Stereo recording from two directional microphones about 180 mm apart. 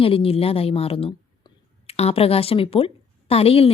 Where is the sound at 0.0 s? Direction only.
30° left (ahead or behind).